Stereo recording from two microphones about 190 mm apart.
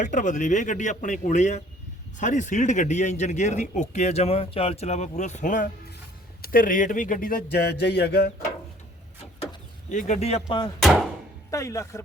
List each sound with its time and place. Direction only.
0.0 s a man's voice: 40° left (ahead or behind); by 8.3 s 55° left (ahead or behind)
9.9 s a man's voice: 40° left (ahead or behind)
10.8 s a sound: centre (ahead or behind)
11.5 s speech: 15° left (ahead or behind)